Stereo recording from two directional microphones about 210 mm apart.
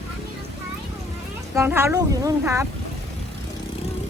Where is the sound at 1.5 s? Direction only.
10° right (ahead or behind).